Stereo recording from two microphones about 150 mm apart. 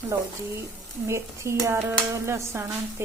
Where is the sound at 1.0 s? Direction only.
20° right (ahead or behind).